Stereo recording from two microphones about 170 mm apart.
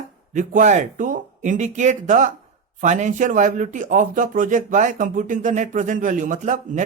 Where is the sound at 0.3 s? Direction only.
45° right (ahead or behind).